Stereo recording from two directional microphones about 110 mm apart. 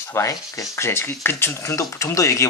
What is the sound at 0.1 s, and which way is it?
Rub, 30° left (ahead or behind).